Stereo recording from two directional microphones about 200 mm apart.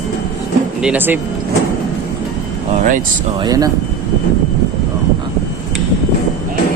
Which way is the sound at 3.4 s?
15° right (ahead or behind).